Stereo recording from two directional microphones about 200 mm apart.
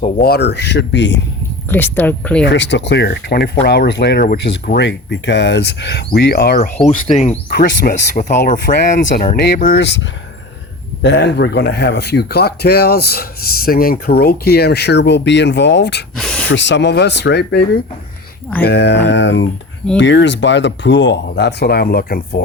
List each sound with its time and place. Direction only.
0.2 s speech: 55° left (ahead or behind)
1.7 s speech: 10° left (ahead or behind)
2.4 s speech: 60° left (ahead or behind)
6.8 s speech: 35° left (ahead or behind); by 10.0 s 55° left (ahead or behind)
11.0 s speech: 55° left (ahead or behind)
16.1 s a sound: 5° left (ahead or behind)
16.5 s speech: 65° left (ahead or behind)